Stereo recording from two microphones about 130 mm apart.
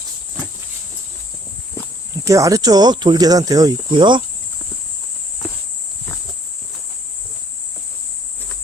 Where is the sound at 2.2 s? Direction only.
25° right (ahead or behind).